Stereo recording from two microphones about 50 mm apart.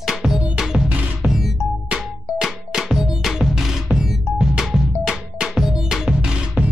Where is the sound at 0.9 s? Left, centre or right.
Right.